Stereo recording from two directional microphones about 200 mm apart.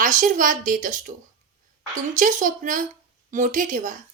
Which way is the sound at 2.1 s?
40° right (ahead or behind).